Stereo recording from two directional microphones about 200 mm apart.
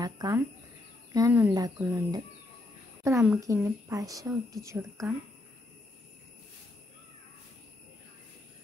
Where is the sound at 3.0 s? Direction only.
10° right (ahead or behind).